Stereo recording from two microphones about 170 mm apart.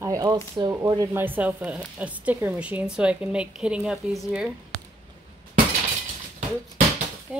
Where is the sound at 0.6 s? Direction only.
25° right (ahead or behind).